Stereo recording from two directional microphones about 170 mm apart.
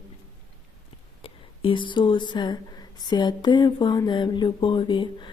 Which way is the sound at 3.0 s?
25° left (ahead or behind).